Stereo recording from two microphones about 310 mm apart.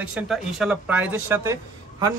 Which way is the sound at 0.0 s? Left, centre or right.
Centre.